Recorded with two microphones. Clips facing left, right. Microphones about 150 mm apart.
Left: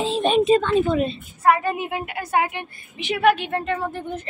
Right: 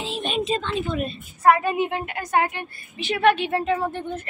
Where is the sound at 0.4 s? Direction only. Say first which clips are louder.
Left 7 dB; 55° left (ahead or behind).